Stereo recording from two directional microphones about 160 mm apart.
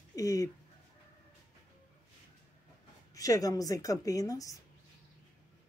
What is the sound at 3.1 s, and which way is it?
Speech, 20° left (ahead or behind).